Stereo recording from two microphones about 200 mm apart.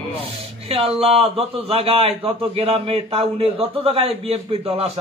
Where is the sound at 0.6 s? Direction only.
30° right (ahead or behind).